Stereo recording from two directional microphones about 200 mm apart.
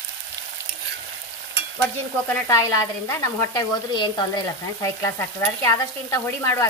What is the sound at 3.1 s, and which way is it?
Speech, 15° left (ahead or behind).